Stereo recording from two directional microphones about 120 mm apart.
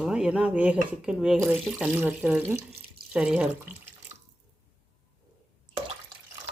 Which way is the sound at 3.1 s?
5° right (ahead or behind).